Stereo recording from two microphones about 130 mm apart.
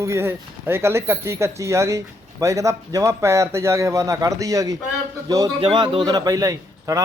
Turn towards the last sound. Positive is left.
turn(degrees=-25)  # may be behind; listen again after turning